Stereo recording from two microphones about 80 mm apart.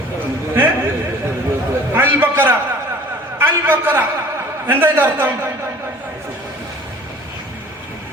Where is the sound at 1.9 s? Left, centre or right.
Right.